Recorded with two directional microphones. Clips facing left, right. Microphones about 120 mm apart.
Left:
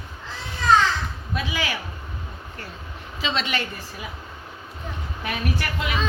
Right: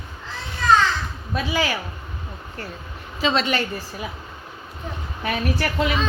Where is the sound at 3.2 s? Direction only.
40° right (ahead or behind).